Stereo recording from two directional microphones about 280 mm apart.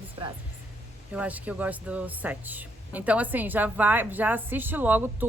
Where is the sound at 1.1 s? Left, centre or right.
Centre.